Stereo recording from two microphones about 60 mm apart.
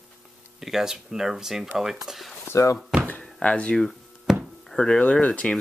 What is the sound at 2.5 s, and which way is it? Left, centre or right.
Speech, left.